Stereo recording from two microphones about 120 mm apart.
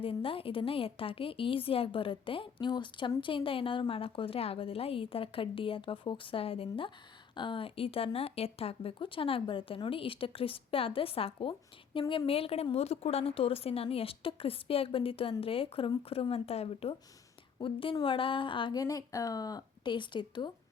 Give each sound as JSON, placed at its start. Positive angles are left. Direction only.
{"t": 0.0, "sound": "speech", "side_deg": 50}
{"t": 17.6, "sound": "speech", "side_deg": 45}